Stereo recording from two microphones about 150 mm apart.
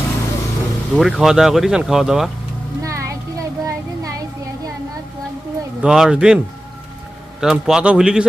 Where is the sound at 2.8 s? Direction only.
20° right (ahead or behind).